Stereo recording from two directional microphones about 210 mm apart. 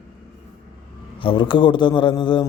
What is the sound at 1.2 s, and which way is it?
A man's voice, 25° left (ahead or behind).